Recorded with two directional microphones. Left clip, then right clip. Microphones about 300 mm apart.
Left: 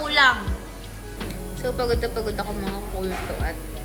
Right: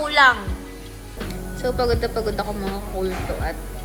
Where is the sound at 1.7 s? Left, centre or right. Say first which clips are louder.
Right 3 dB; centre.